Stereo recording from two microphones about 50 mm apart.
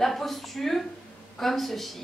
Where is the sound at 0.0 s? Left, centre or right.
Centre.